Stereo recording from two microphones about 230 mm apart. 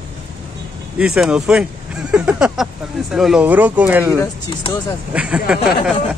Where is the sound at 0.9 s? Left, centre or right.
Centre.